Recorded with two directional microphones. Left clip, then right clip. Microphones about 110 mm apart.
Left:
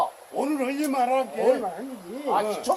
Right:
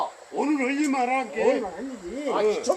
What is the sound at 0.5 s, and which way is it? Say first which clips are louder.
Speech: left 1 dB; 40° left (ahead or behind).